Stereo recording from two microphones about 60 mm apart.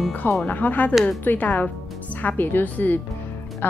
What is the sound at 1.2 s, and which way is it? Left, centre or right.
Speech, left.